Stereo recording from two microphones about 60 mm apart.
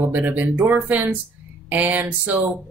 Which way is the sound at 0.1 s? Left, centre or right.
Right.